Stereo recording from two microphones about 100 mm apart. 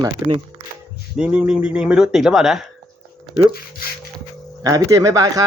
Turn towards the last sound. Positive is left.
turn(degrees=-35)  # may be behind; listen again after turning